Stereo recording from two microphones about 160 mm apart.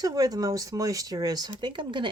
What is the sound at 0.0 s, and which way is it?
Speech, 25° right (ahead or behind).